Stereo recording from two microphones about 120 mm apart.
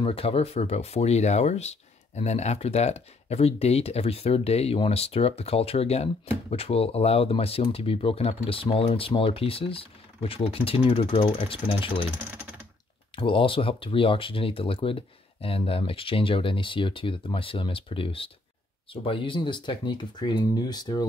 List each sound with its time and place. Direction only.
0.0 s speech: 55° left (ahead or behind)
11.5 s speech: 45° left (ahead or behind)
13.1 s speech: 45° left (ahead or behind)